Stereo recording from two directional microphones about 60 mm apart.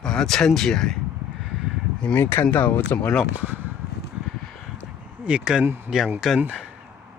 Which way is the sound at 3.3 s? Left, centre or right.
Right.